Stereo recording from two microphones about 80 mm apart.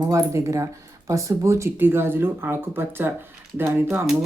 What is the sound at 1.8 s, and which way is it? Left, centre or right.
Speech, right.